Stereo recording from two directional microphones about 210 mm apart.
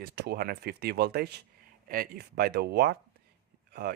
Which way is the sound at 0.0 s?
50° right (ahead or behind).